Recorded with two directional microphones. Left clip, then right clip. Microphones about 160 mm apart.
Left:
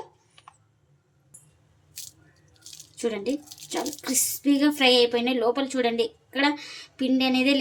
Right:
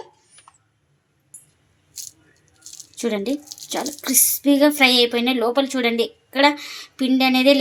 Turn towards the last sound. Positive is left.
turn(degrees=-40)  # may be behind; listen again after turning